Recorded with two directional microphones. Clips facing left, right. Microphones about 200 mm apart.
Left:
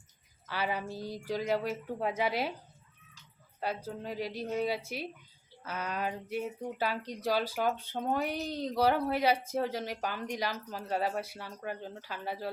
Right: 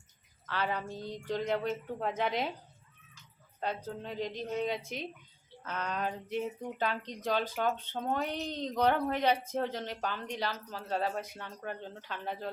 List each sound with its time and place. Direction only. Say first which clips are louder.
0.4 s speech: even; 10° left (ahead or behind)
3.6 s speech: left 1 dB; 10° left (ahead or behind)